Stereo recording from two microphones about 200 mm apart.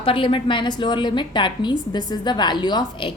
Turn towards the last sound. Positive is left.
turn(degrees=25)  # may be behind; listen again after turning